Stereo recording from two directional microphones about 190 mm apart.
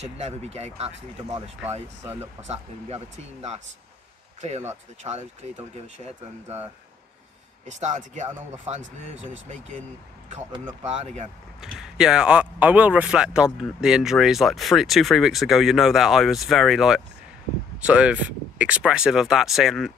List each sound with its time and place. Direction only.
0.0 s speech: 35° right (ahead or behind)
2.4 s speech: 35° right (ahead or behind)
4.4 s speech: 35° right (ahead or behind)
7.8 s speech: 40° right (ahead or behind)
10.5 s speech: 25° right (ahead or behind)
10.9 s speech: 35° right (ahead or behind)
11.6 s speech: 5° right (ahead or behind)